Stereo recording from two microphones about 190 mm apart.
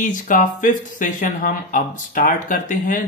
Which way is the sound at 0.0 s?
45° left (ahead or behind).